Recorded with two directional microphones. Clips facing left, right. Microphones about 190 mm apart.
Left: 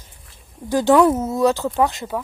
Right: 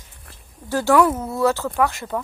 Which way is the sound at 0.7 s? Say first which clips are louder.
Left 3 dB; 20° left (ahead or behind).